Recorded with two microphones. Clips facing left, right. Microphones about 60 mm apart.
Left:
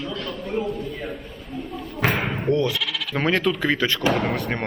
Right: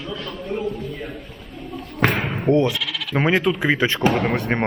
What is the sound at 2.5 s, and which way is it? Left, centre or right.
Speech, right.